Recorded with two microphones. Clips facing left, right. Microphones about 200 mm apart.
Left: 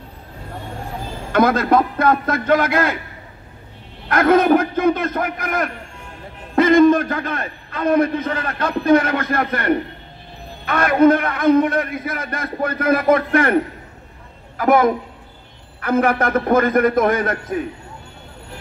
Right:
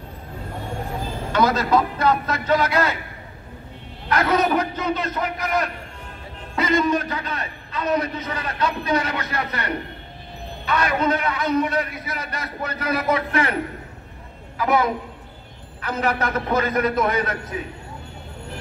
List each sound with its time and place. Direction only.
1.3 s a man's voice: 55° left (ahead or behind)
4.1 s a man's voice: 55° left (ahead or behind)
14.6 s a man's voice: 50° left (ahead or behind)